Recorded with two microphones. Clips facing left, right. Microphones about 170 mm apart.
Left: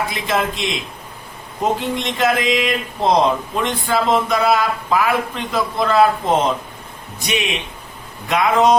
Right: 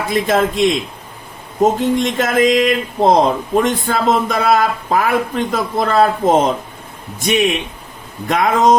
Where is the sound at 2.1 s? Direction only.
50° right (ahead or behind).